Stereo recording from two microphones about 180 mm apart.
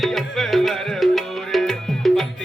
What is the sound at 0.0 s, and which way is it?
Music, centre (ahead or behind).